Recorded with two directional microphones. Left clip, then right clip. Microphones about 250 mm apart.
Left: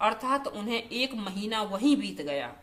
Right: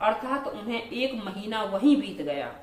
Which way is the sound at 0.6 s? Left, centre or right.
Left.